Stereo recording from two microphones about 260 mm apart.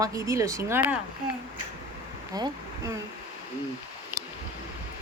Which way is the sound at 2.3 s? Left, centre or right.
Centre.